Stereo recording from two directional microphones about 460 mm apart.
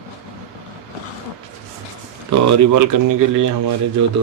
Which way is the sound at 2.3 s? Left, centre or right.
Right.